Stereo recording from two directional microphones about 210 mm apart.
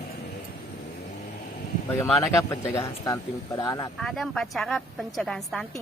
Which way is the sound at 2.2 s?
15° left (ahead or behind).